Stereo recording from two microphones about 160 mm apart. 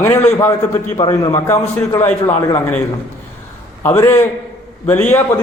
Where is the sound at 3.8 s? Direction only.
15° left (ahead or behind).